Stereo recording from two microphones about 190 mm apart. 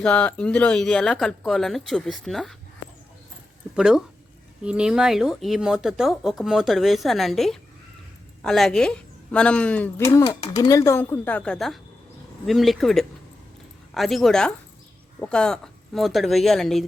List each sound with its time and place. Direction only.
0.0 s speech: 5° left (ahead or behind)
3.8 s speech: 5° right (ahead or behind)